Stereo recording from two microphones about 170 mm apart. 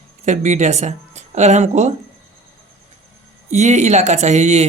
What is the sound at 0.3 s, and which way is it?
Speech, 45° right (ahead or behind).